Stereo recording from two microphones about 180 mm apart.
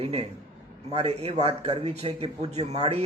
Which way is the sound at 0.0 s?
35° right (ahead or behind).